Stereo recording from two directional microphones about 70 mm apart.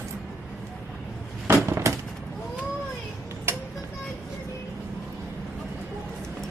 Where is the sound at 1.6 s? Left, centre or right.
Right.